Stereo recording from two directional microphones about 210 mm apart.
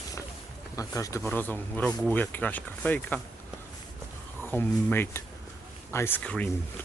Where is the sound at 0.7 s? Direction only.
15° left (ahead or behind).